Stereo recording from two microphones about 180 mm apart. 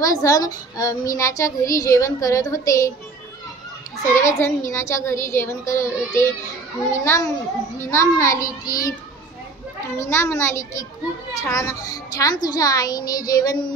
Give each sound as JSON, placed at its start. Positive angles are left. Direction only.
{"t": 0.0, "sound": "a child's voice", "side_deg": 20}
{"t": 4.2, "sound": "a child's voice", "side_deg": 15}
{"t": 9.9, "sound": "a child's voice", "side_deg": 15}